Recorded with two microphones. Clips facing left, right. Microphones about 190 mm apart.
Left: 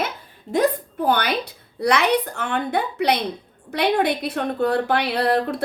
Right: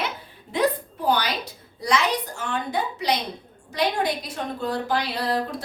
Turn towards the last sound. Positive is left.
turn(degrees=60)  # may be behind; listen again after turning